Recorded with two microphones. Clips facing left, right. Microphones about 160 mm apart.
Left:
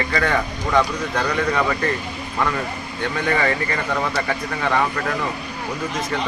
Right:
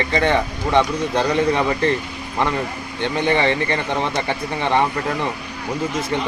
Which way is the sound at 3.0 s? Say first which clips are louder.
Right 3 dB; 25° right (ahead or behind).